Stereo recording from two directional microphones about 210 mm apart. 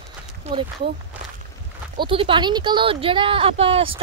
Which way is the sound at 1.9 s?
25° right (ahead or behind).